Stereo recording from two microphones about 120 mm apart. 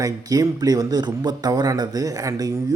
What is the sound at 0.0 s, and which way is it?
A man's voice, 30° right (ahead or behind).